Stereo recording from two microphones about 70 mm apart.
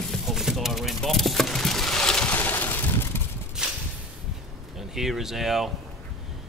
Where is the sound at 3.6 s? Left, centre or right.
Centre.